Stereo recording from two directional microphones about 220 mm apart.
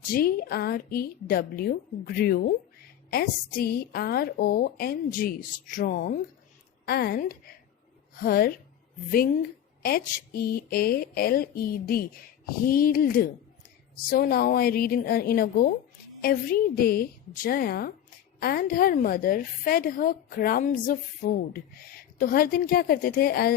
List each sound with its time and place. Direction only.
0.1 s a woman's voice: 45° left (ahead or behind)